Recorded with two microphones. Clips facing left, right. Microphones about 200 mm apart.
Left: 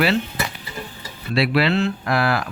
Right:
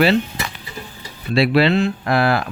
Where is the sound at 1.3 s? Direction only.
25° right (ahead or behind).